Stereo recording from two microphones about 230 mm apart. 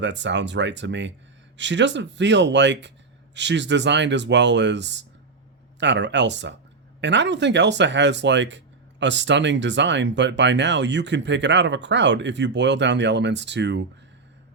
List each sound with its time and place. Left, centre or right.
0.0 s speech: right